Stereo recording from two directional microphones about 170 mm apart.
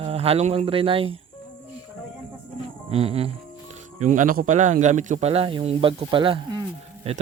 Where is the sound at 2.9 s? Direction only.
35° right (ahead or behind).